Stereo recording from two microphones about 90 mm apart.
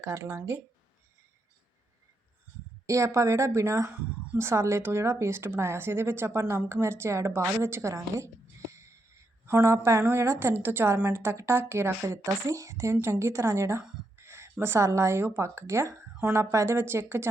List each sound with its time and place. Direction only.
0.0 s a woman's voice: 30° right (ahead or behind)
2.8 s a woman's voice: 35° right (ahead or behind)
14.2 s a sound: 30° right (ahead or behind)
14.5 s speech: 25° right (ahead or behind)